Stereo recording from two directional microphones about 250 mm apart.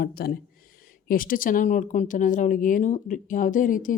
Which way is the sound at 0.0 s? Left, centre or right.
Left.